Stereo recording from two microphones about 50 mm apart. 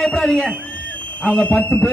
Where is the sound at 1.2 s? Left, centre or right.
Left.